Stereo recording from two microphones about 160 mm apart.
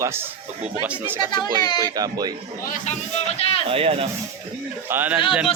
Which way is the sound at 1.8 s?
25° right (ahead or behind).